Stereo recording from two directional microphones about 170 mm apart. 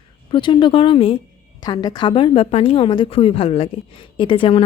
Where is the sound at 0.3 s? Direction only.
30° left (ahead or behind).